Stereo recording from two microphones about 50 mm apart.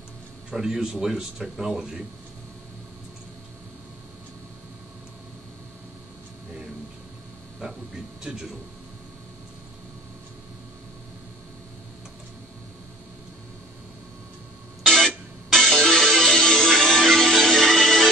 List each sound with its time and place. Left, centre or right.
0.5 s speech: centre
7.6 s a sound: centre
8.2 s speech: centre
14.9 s music: centre